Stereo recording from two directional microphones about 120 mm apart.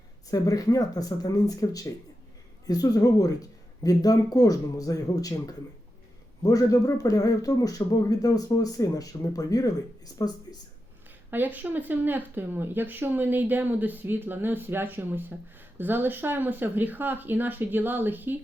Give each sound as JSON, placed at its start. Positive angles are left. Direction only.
{"t": 0.3, "sound": "a man's voice", "side_deg": 30}
{"t": 11.3, "sound": "speech", "side_deg": -15}